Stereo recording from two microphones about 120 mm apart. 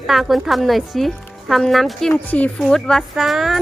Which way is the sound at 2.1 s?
15° left (ahead or behind).